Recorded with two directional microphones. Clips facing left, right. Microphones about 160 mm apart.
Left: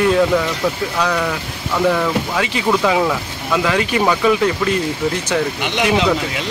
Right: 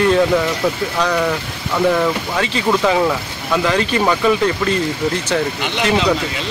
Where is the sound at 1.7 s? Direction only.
5° right (ahead or behind).